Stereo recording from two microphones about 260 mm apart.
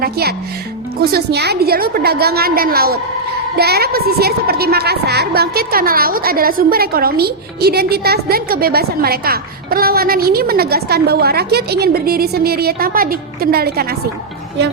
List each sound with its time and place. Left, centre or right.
0.0 s a woman's voice: right